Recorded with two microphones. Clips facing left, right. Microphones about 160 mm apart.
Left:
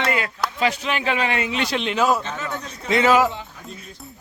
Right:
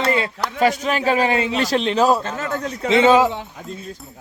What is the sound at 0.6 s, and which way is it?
A man's voice, 45° right (ahead or behind).